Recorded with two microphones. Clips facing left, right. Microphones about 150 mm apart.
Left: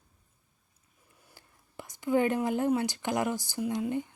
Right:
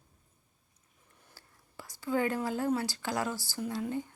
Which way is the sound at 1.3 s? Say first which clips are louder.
Left 4 dB; 20° left (ahead or behind).